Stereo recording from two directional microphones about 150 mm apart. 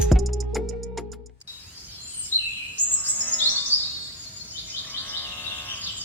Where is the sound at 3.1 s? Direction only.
10° left (ahead or behind).